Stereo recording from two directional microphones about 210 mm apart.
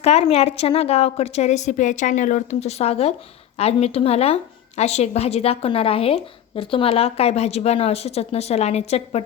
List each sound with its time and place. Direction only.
0.0 s a woman's voice: 30° left (ahead or behind)